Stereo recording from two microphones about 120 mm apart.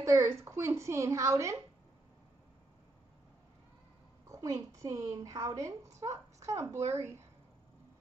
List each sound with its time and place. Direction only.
0.0 s a woman's voice: 25° right (ahead or behind)
4.3 s a woman's voice: 25° right (ahead or behind)